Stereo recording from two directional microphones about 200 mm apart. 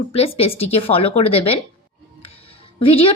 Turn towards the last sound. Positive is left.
turn(degrees=25)  # may be behind; listen again after turning